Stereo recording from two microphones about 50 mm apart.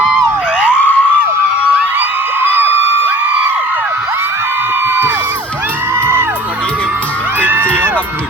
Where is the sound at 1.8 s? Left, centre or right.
Right.